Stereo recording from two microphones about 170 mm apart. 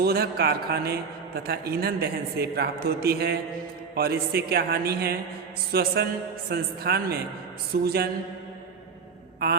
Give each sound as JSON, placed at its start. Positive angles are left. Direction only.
{"t": 0.0, "sound": "a man's voice", "side_deg": -65}